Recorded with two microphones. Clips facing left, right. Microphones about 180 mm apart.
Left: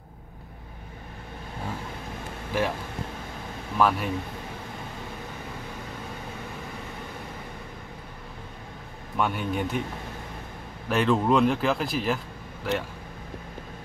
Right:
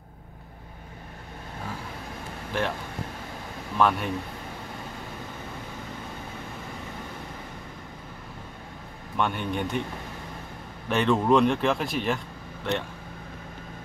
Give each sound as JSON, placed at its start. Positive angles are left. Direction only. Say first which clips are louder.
{"t": 2.5, "sound": "speech", "louder": "left 2 dB", "side_deg": 5}
{"t": 3.7, "sound": "speech", "louder": "even", "side_deg": 5}
{"t": 9.1, "sound": "speech", "louder": "left 1 dB", "side_deg": 5}
{"t": 10.9, "sound": "speech", "louder": "right 1 dB", "side_deg": 0}